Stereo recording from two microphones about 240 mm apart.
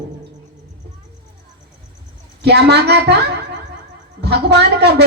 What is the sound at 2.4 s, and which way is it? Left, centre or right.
A woman's voice, right.